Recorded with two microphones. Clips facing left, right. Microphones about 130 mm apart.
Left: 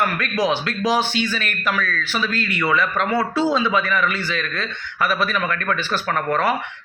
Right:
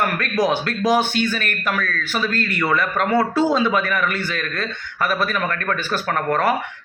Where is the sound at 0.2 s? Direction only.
50° right (ahead or behind).